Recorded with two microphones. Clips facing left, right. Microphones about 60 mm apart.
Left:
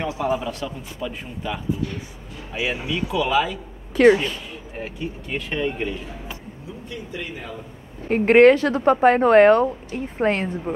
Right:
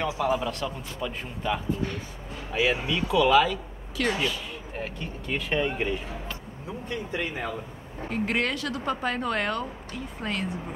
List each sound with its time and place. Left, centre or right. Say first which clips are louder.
0.0 s a man's voice: left 2 dB; centre
3.9 s speech: left 12 dB; left
4.7 s speech: left 5 dB; centre
5.5 s a man's voice: left 1 dB; centre
8.1 s speech: left 15 dB; left